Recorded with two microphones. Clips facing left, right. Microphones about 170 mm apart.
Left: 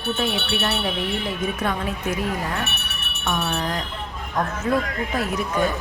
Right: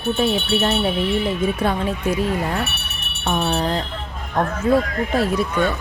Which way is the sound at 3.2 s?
30° right (ahead or behind).